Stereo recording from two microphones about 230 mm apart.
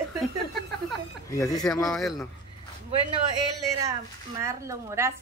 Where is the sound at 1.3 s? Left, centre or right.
Centre.